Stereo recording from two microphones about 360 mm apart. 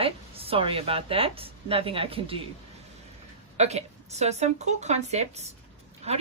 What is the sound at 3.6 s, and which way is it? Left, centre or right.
Speech, centre.